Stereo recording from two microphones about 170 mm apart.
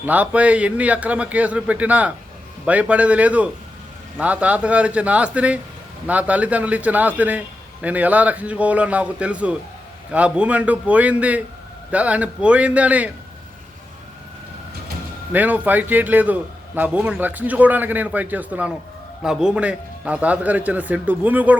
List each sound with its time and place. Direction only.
0.0 s a man's voice: 10° right (ahead or behind)
15.3 s a man's voice: 10° right (ahead or behind)